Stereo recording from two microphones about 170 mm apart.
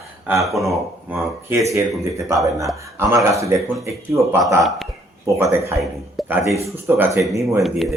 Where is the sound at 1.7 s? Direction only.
20° right (ahead or behind).